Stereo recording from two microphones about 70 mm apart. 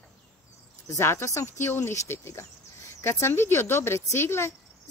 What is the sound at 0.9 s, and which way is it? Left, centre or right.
Speech, left.